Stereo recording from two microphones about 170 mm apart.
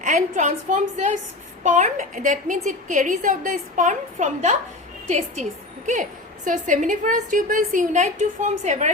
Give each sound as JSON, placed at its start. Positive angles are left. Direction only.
{"t": 0.0, "sound": "a woman's voice", "side_deg": -45}